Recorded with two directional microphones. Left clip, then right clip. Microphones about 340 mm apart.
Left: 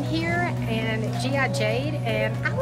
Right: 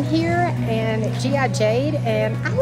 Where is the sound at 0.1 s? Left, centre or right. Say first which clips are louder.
Right 5 dB; centre.